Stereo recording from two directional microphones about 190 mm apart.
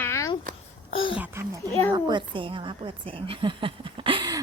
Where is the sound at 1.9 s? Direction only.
25° right (ahead or behind).